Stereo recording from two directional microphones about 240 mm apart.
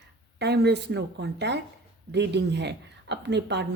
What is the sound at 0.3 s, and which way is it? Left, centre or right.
A woman's voice, right.